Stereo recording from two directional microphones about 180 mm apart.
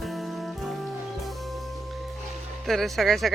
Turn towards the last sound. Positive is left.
turn(degrees=0)  # may be behind; listen again after turning